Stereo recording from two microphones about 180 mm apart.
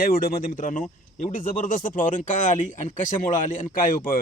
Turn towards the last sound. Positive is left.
turn(degrees=50)  # may be behind; listen again after turning